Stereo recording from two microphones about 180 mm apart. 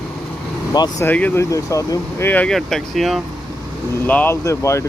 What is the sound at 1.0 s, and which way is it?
Speech, 10° left (ahead or behind).